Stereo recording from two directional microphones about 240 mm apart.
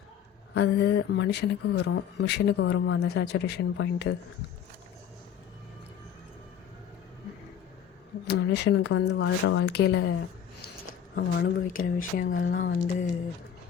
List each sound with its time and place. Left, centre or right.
0.5 s speech: left
8.3 s speech: left